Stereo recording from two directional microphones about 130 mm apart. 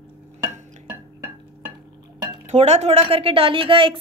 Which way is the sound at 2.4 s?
55° right (ahead or behind).